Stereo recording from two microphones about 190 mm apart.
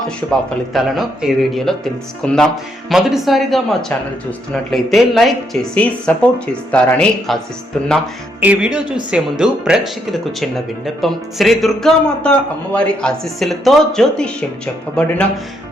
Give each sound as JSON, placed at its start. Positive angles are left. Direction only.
{"t": 0.3, "sound": "speech", "side_deg": 0}
{"t": 8.4, "sound": "speech", "side_deg": -5}